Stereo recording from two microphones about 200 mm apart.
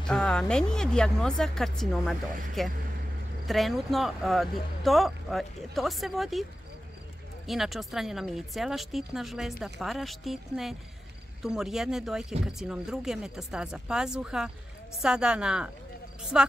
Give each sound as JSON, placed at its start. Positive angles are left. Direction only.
{"t": 0.0, "sound": "speech", "side_deg": 5}
{"t": 7.4, "sound": "speech", "side_deg": 0}